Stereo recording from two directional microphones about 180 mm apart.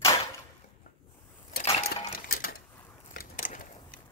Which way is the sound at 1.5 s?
55° left (ahead or behind).